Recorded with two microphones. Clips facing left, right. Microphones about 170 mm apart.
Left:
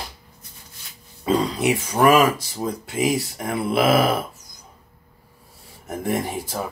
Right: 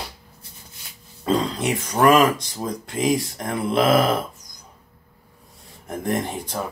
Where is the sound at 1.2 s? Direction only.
5° left (ahead or behind).